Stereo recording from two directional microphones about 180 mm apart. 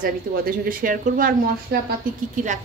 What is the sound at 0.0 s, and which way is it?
A woman's voice, 50° right (ahead or behind).